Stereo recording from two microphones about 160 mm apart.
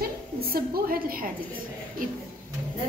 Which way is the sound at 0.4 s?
70° right (ahead or behind).